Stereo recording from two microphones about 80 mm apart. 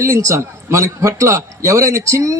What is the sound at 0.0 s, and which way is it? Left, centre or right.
A man's voice, right.